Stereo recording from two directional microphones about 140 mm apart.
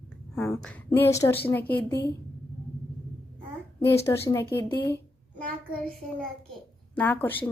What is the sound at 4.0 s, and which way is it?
Speech, 20° left (ahead or behind).